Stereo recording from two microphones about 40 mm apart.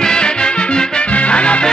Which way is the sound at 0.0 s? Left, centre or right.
Left.